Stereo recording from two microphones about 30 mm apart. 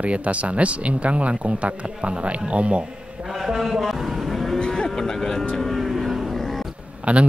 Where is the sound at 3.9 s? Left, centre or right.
Centre.